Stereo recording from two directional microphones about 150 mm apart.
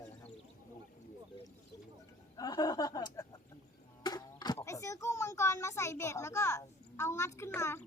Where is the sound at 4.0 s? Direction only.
25° left (ahead or behind).